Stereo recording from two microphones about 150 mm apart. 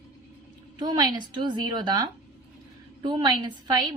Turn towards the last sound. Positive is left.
turn(degrees=-30)  # may be behind; listen again after turning